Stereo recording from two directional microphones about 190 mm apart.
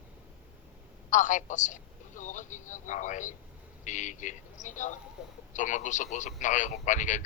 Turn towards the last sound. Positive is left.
turn(degrees=40)  # may be behind; listen again after turning